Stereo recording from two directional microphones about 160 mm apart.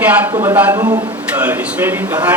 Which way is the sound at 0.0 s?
10° right (ahead or behind).